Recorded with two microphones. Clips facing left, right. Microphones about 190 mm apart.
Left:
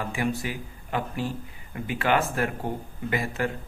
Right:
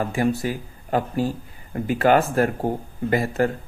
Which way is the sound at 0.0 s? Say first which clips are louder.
Right 6 dB; 40° right (ahead or behind).